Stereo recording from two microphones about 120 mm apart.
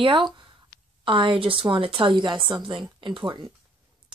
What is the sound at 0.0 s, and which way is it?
Speech, 40° right (ahead or behind).